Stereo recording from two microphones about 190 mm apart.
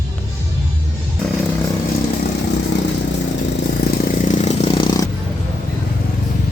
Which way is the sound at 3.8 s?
55° left (ahead or behind).